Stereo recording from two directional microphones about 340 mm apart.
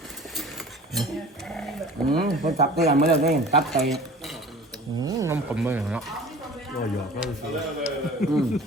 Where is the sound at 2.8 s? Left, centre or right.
Right.